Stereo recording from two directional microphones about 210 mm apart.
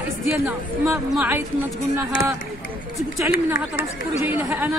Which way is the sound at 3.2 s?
10° right (ahead or behind).